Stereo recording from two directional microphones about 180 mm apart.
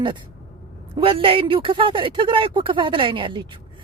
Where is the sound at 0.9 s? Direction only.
30° right (ahead or behind).